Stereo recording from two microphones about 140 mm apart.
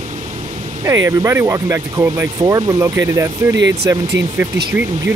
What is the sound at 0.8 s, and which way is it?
Speech, 20° right (ahead or behind).